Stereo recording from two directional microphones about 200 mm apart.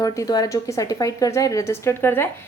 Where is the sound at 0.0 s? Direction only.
15° left (ahead or behind).